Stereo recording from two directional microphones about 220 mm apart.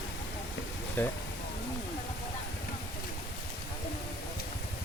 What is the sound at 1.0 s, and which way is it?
Speech, 10° left (ahead or behind).